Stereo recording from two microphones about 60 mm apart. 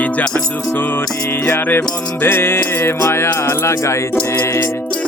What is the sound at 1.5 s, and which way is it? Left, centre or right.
Music, left.